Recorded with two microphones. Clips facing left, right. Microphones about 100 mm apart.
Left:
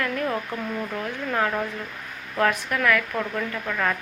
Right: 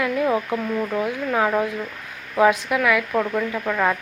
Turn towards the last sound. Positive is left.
turn(degrees=-15)  # may be behind; listen again after turning